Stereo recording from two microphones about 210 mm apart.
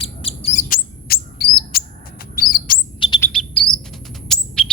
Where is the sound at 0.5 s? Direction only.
40° left (ahead or behind).